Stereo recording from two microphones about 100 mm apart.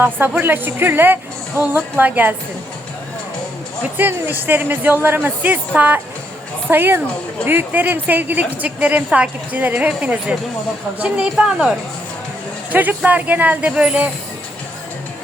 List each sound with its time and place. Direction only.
0.0 s speech: 20° right (ahead or behind)
3.9 s a woman's voice: 20° right (ahead or behind)
12.7 s a woman's voice: 15° right (ahead or behind)